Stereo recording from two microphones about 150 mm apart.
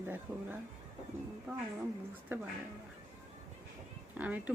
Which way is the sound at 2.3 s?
15° right (ahead or behind).